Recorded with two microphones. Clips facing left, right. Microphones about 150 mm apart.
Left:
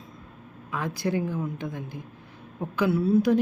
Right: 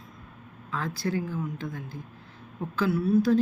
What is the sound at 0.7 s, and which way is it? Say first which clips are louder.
Speech: left 2 dB; 15° left (ahead or behind).